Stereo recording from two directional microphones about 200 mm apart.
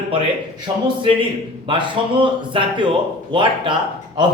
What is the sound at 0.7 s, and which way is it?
Speech, 20° right (ahead or behind).